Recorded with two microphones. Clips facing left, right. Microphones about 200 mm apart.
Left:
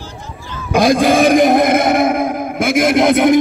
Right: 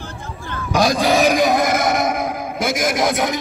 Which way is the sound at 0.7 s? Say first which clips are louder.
Left 5 dB; 50° left (ahead or behind).